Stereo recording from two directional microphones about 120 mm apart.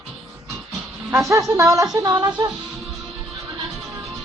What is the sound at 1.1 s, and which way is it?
Speech, 25° right (ahead or behind).